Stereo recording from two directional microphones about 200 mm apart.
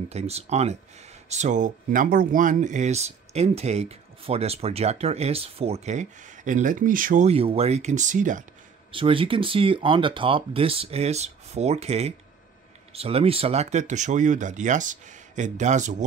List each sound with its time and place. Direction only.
0.1 s speech: 30° right (ahead or behind)
8.9 s speech: 25° right (ahead or behind)